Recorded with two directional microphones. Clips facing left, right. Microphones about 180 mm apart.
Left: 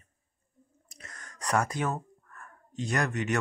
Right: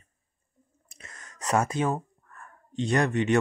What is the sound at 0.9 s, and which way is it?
Gasp, 25° right (ahead or behind).